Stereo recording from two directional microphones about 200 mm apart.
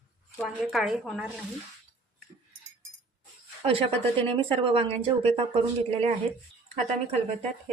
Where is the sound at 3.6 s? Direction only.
30° right (ahead or behind).